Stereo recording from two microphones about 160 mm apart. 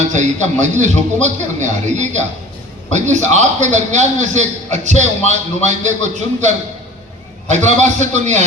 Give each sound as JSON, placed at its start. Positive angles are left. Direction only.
{"t": 0.1, "sound": "a man's voice", "side_deg": -50}
{"t": 7.5, "sound": "a man's voice", "side_deg": -50}